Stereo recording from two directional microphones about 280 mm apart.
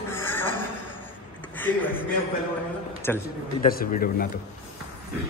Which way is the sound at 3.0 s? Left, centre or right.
Centre.